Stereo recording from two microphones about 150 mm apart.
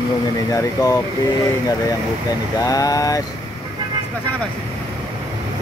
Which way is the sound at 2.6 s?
25° left (ahead or behind).